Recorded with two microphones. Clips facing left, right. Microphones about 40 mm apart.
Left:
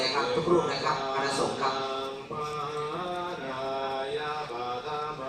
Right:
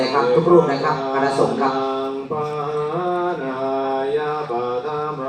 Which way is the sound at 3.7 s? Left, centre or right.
Right.